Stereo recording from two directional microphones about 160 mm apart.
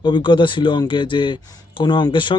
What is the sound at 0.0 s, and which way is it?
A man's voice, 30° left (ahead or behind).